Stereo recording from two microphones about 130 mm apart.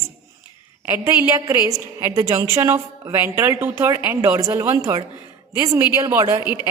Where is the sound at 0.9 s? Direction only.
20° right (ahead or behind).